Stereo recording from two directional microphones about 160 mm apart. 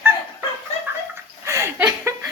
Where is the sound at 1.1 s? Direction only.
20° right (ahead or behind).